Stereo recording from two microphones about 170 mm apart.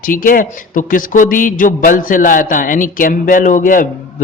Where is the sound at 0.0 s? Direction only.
55° left (ahead or behind).